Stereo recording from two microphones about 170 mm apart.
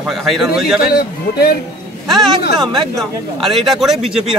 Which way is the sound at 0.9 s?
65° left (ahead or behind).